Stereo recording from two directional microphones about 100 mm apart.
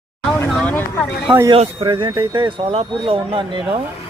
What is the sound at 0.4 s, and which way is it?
Vehicle, 15° left (ahead or behind).